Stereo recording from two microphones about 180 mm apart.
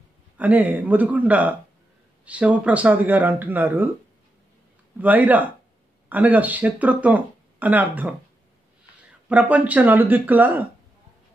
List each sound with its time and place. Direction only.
0.4 s speech: 10° right (ahead or behind)
5.0 s speech: 10° right (ahead or behind)
9.3 s speech: 5° right (ahead or behind)